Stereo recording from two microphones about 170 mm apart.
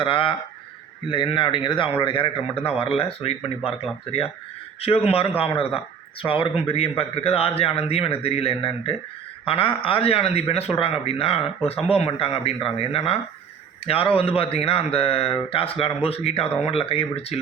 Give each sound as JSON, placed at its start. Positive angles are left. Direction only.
{"t": 0.0, "sound": "speech", "side_deg": 30}